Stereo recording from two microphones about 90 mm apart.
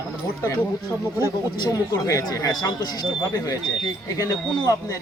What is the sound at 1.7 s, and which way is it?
Speech, 40° left (ahead or behind).